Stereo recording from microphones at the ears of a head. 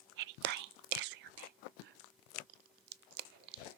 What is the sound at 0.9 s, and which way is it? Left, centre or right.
Biting, right.